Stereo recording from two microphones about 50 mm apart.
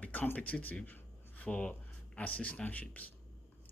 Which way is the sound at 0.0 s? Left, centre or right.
Left.